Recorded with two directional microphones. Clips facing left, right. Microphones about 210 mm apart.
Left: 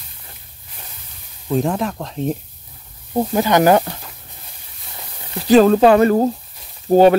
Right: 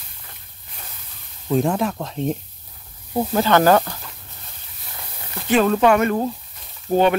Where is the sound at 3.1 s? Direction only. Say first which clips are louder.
Left 2 dB; 15° left (ahead or behind).